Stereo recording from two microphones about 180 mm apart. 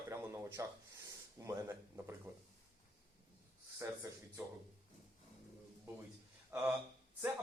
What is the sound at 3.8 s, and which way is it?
Speech, 15° right (ahead or behind).